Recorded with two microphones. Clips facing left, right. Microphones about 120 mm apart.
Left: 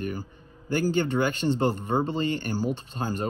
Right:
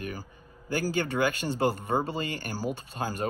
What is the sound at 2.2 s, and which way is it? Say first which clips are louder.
Speech: left 7 dB; 45° right (ahead or behind).